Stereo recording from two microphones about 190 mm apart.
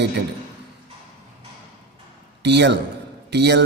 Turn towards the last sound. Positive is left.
turn(degrees=-60)  # may be behind; listen again after turning